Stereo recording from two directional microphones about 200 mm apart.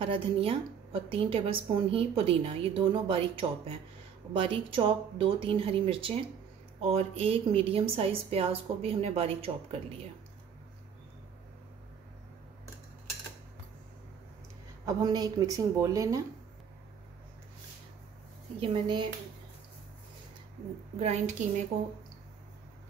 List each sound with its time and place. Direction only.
0.0 s a woman's voice: 25° right (ahead or behind)
14.9 s a woman's voice: 20° right (ahead or behind)
18.6 s a woman's voice: 25° right (ahead or behind)
21.0 s a woman's voice: 35° right (ahead or behind)